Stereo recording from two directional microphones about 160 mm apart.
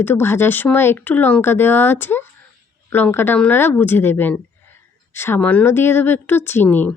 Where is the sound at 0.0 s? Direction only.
15° left (ahead or behind).